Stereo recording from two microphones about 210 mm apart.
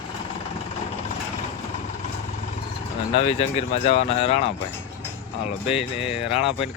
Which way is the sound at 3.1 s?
30° left (ahead or behind).